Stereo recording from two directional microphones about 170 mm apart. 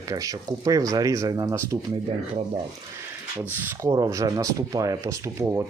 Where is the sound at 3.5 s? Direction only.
15° right (ahead or behind).